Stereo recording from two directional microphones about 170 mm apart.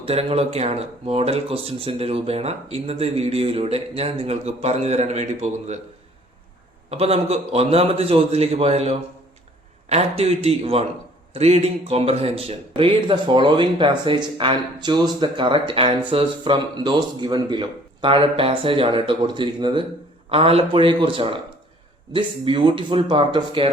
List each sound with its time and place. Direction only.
0.0 s speech: 35° right (ahead or behind)
6.9 s speech: 35° right (ahead or behind)